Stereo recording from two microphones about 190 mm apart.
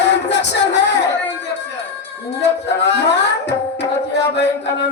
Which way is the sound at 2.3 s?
65° left (ahead or behind).